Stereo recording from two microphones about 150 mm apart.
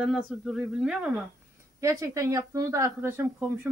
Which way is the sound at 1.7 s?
20° right (ahead or behind).